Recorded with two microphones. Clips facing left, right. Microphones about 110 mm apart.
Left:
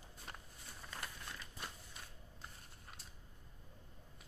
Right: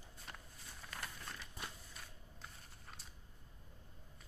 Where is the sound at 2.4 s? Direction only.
Centre (ahead or behind).